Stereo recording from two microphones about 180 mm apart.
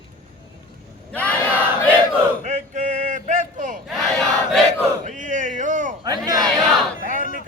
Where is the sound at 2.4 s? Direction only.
40° right (ahead or behind).